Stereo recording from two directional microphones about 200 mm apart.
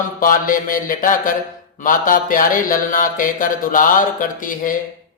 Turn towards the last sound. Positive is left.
turn(degrees=40)  # may be behind; listen again after turning